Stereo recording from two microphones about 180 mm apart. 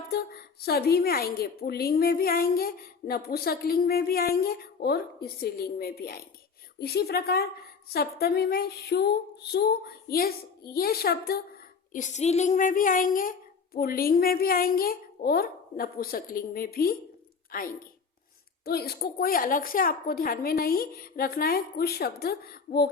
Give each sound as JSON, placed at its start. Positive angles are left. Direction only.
{"t": 0.1, "sound": "a woman's voice", "side_deg": 60}
{"t": 11.9, "sound": "a woman's voice", "side_deg": 40}